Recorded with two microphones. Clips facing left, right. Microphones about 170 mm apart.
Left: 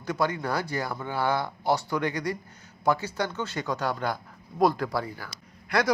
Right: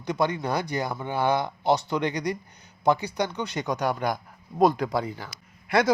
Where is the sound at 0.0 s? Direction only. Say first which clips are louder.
Right 2 dB; 20° right (ahead or behind).